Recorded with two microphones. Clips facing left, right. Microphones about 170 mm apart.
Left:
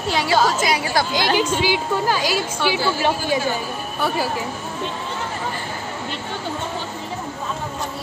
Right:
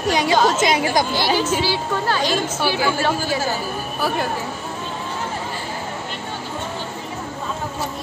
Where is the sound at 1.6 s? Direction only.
15° left (ahead or behind).